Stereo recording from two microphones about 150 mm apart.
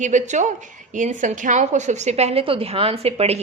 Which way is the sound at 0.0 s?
55° right (ahead or behind).